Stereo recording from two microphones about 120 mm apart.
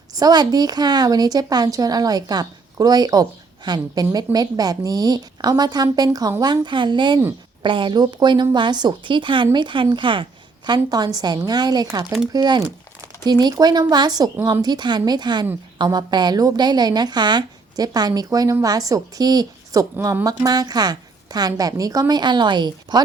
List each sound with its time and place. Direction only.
0.1 s a woman's voice: 35° right (ahead or behind)
10.7 s a woman's voice: 35° right (ahead or behind)